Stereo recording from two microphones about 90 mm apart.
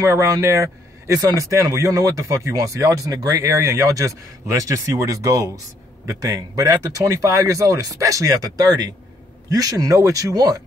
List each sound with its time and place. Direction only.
0.0 s speech: 35° right (ahead or behind)